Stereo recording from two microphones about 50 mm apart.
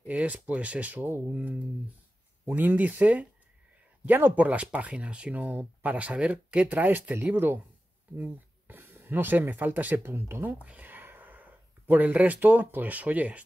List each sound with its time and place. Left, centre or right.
0.0 s speech: right
2.4 s speech: right
4.7 s speech: right
8.7 s speech: right
10.1 s speech: right
10.6 s a sound: right
11.9 s speech: right